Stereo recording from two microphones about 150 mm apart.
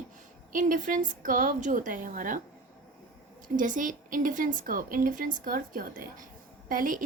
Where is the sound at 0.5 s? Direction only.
60° right (ahead or behind).